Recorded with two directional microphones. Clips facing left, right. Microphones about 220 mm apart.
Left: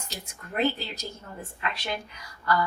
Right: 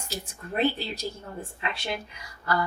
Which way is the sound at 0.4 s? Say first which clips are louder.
Right 1 dB; 30° right (ahead or behind).